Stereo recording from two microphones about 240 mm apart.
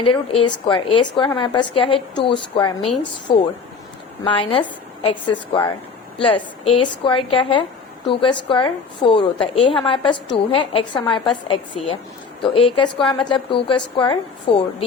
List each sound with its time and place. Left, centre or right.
0.0 s a woman's voice: left